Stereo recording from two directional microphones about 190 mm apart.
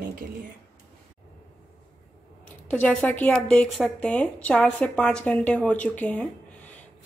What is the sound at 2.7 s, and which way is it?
Speech, 5° left (ahead or behind).